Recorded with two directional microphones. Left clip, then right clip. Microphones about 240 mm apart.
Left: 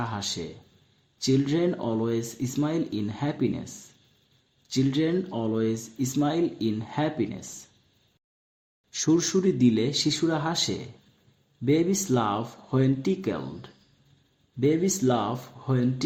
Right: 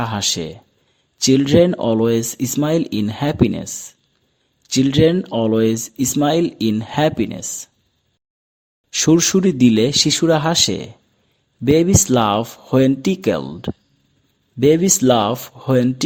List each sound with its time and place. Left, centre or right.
0.0 s speech: right
8.9 s speech: right